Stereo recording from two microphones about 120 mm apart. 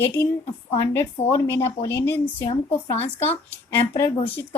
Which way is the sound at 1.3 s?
25° left (ahead or behind).